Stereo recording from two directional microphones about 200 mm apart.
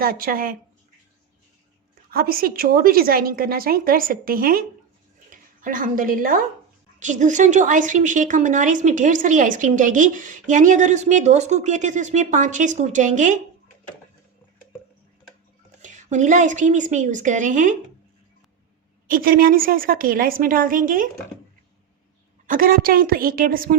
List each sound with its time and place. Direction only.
0.0 s speech: 45° right (ahead or behind)
2.0 s a woman's voice: 45° right (ahead or behind)
15.8 s a woman's voice: 35° right (ahead or behind)
19.0 s speech: 45° right (ahead or behind)
22.4 s speech: 45° right (ahead or behind)